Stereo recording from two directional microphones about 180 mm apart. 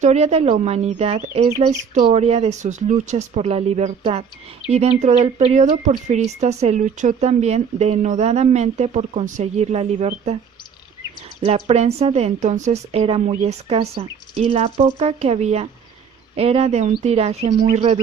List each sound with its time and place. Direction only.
0.0 s speech: 40° right (ahead or behind)
11.4 s speech: 35° right (ahead or behind)